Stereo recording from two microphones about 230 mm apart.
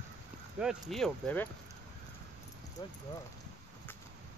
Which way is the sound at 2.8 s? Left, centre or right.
Centre.